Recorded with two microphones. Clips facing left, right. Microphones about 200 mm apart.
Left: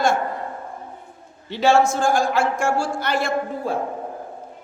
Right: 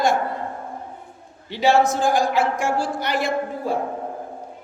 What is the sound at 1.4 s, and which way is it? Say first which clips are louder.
A man's voice: left 1 dB; 15° right (ahead or behind).